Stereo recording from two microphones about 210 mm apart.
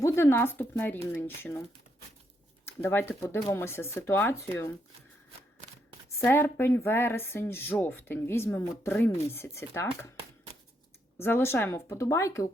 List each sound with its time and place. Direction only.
0.0 s speech: 15° left (ahead or behind)
2.6 s speech: 10° left (ahead or behind)
6.1 s speech: 10° left (ahead or behind)
11.2 s speech: 10° left (ahead or behind)